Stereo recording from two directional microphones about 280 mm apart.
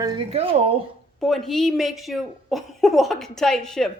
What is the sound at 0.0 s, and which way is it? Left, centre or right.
Speech, centre.